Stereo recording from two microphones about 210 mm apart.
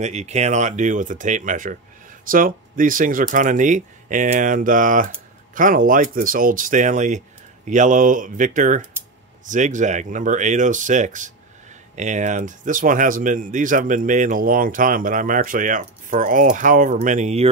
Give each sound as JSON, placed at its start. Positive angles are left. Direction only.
{"t": 0.0, "sound": "speech", "side_deg": -35}